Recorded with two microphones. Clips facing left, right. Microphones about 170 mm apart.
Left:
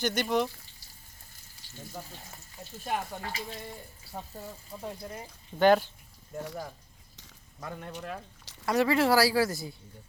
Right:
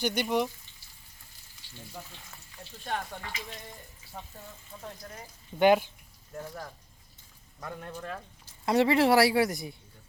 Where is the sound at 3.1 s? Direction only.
40° left (ahead or behind).